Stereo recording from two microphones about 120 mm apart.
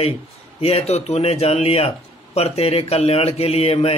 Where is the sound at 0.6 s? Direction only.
60° left (ahead or behind).